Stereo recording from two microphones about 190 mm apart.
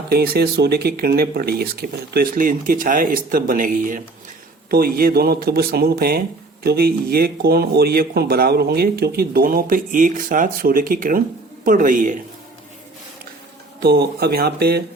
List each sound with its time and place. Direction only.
0.1 s speech: 55° right (ahead or behind)
13.7 s speech: 55° right (ahead or behind)